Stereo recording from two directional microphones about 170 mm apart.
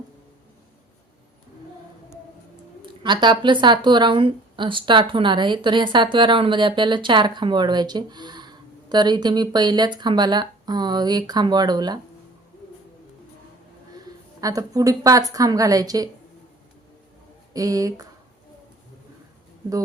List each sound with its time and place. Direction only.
2.8 s speech: 30° right (ahead or behind)
14.4 s speech: 20° right (ahead or behind)
17.5 s speech: 20° right (ahead or behind)